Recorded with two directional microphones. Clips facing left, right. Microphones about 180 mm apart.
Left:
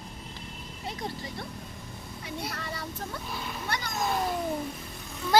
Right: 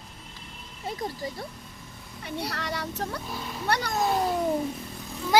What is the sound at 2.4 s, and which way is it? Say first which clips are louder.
Speech: right 4 dB; 75° right (ahead or behind).